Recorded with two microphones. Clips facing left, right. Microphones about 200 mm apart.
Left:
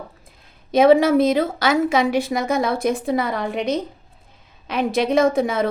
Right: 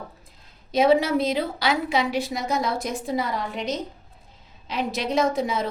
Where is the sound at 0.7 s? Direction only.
55° left (ahead or behind).